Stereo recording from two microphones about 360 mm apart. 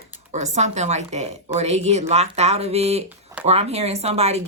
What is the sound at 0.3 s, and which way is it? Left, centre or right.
A woman's voice, centre.